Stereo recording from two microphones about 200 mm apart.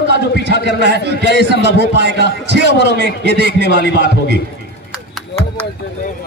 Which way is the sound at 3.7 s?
60° left (ahead or behind).